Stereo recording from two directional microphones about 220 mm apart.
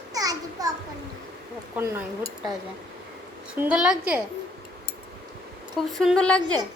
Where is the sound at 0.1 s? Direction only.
15° right (ahead or behind).